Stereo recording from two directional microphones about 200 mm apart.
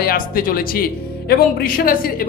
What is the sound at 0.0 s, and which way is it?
Speech, 45° left (ahead or behind).